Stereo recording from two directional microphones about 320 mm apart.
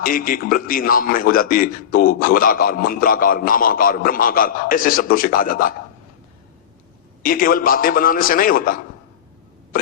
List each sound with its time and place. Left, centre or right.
0.0 s a man's voice: left
7.2 s a man's voice: left